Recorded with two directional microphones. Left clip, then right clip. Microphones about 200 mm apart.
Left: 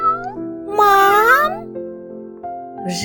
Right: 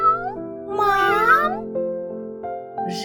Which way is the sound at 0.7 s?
40° left (ahead or behind).